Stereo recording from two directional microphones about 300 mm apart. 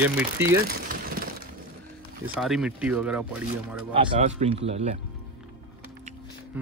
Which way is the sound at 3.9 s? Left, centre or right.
Centre.